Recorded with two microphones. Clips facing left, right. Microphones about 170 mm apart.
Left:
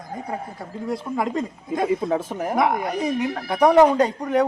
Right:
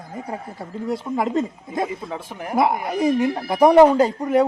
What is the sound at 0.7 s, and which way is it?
Speech, centre (ahead or behind).